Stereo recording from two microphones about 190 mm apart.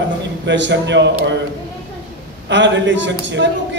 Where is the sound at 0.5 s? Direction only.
70° right (ahead or behind).